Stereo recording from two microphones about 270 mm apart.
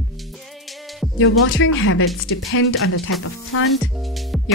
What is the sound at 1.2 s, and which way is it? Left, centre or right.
A woman's voice, left.